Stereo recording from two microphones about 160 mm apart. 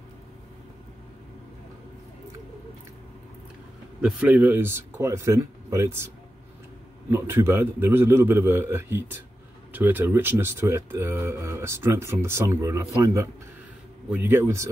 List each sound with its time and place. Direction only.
4.0 s speech: 10° right (ahead or behind)
7.1 s speech: 15° right (ahead or behind)